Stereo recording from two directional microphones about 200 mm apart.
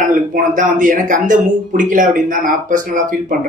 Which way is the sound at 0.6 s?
40° right (ahead or behind).